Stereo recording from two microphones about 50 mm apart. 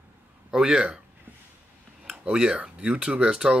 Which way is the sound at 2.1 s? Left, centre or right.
Centre.